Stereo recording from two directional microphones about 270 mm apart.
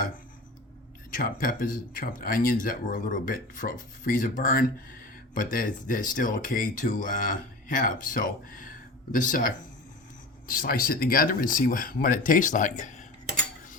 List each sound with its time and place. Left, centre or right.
1.1 s speech: left